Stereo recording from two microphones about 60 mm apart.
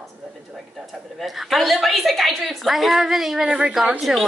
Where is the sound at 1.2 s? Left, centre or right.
Centre.